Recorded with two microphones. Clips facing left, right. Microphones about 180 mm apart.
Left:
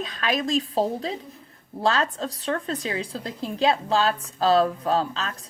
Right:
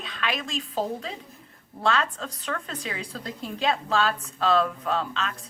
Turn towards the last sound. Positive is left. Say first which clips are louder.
# left 2 dB
turn(degrees=35)  # may be behind; listen again after turning